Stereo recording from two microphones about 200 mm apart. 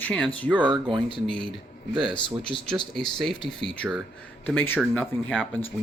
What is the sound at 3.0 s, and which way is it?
Speech, centre (ahead or behind).